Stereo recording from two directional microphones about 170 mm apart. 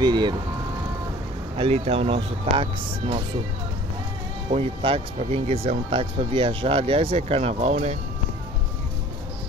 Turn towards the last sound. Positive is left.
turn(degrees=-40)  # may be behind; listen again after turning